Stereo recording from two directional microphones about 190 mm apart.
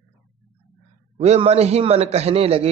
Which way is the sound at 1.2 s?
35° right (ahead or behind).